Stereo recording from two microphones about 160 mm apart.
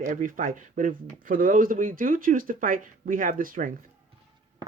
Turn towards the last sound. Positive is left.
turn(degrees=-60)  # may be behind; listen again after turning